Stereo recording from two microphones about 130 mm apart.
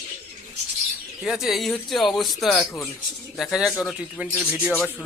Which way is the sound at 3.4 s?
5° right (ahead or behind).